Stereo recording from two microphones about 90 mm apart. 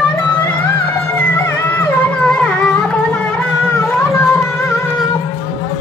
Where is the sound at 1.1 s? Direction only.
25° left (ahead or behind).